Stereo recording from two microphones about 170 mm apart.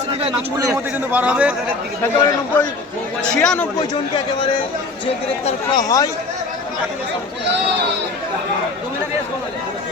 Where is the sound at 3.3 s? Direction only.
5° left (ahead or behind).